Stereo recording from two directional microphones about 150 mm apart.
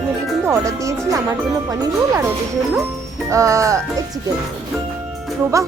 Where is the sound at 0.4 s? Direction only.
20° right (ahead or behind).